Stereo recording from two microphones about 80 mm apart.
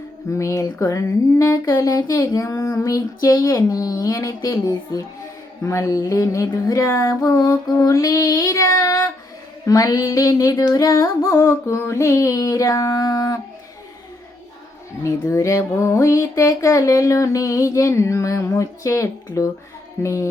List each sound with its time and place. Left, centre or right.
0.3 s music: left
15.0 s music: left